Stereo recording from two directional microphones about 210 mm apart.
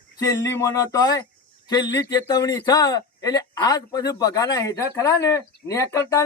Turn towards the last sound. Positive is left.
turn(degrees=15)  # may be behind; listen again after turning